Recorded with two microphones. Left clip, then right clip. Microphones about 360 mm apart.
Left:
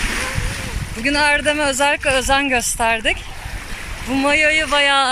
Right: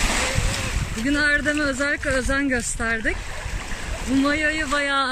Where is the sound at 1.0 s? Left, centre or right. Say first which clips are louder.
Left 5 dB; centre.